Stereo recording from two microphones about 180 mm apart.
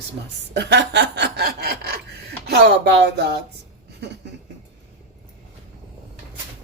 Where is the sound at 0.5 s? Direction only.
75° right (ahead or behind).